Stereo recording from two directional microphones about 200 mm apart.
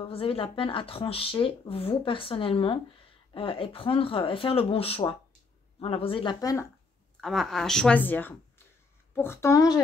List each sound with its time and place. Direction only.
0.0 s speech: 30° left (ahead or behind)
7.2 s speech: centre (ahead or behind); by 9.8 s 15° left (ahead or behind)